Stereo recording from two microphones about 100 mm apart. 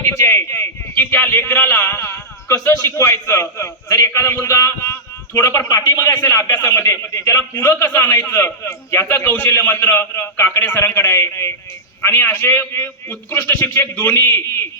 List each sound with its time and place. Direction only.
0.2 s a man's voice: 25° left (ahead or behind)
5.6 s a man's voice: 40° left (ahead or behind)